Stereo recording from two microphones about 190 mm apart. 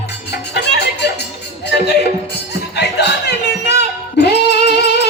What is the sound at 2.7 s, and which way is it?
Music, 60° left (ahead or behind).